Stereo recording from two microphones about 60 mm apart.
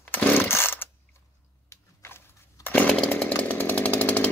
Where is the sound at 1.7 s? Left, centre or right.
Left.